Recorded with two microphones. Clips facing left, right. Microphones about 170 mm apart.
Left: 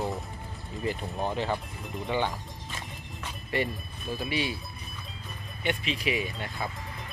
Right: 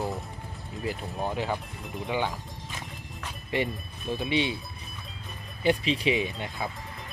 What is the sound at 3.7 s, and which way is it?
Speech, centre (ahead or behind).